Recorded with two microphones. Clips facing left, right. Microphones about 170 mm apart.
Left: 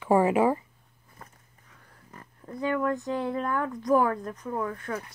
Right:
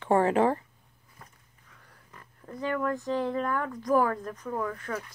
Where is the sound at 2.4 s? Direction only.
15° left (ahead or behind).